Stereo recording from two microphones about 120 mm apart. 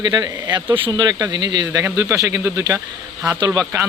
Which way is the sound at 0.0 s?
35° right (ahead or behind).